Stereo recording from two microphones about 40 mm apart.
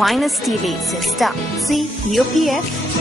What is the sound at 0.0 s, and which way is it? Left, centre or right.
Speech, centre.